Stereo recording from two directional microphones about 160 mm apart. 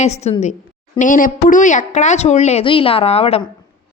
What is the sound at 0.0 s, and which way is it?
Speech, 45° left (ahead or behind).